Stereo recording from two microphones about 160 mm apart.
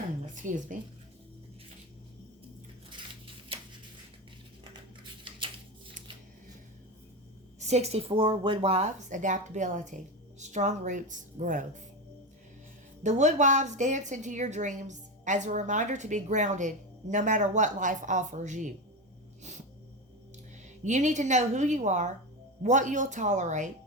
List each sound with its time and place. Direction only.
0.3 s speech: 50° right (ahead or behind)
7.6 s a woman's voice: 45° right (ahead or behind)
13.0 s a woman's voice: 45° right (ahead or behind)
19.4 s a sound: 45° right (ahead or behind)
20.8 s a woman's voice: 50° right (ahead or behind)